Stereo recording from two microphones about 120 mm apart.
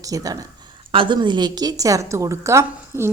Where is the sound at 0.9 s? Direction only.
40° right (ahead or behind); by 3.1 s 25° right (ahead or behind).